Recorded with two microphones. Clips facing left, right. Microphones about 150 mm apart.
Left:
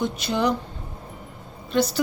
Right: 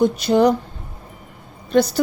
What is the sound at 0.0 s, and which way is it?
Speech, 40° right (ahead or behind).